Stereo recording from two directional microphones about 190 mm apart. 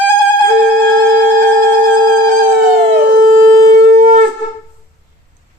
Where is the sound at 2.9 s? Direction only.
50° right (ahead or behind).